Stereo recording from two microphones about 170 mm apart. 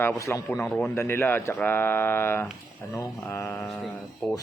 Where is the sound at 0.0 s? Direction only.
15° left (ahead or behind).